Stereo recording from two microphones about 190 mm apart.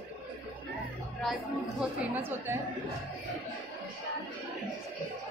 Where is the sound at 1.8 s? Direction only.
10° right (ahead or behind).